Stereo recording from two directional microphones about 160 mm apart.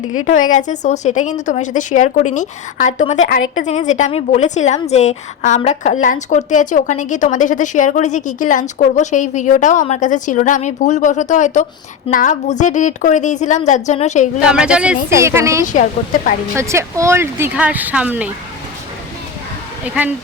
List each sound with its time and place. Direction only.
0.3 s a woman's voice: 55° left (ahead or behind)
14.5 s speech: 5° right (ahead or behind)
15.2 s speech: 15° right (ahead or behind)
15.6 s a woman's voice: 55° left (ahead or behind)
16.6 s speech: 15° right (ahead or behind)
19.8 s speech: 10° right (ahead or behind)